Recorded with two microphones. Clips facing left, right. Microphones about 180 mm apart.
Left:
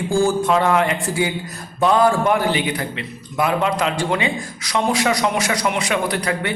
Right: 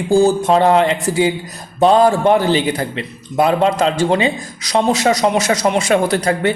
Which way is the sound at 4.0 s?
25° right (ahead or behind).